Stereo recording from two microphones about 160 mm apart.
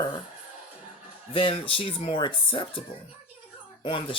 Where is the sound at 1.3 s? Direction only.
35° left (ahead or behind).